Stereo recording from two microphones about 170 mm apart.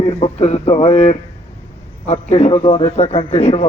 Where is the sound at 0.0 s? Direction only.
40° left (ahead or behind).